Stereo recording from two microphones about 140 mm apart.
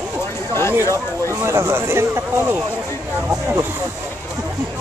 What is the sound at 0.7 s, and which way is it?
Speech, 20° right (ahead or behind).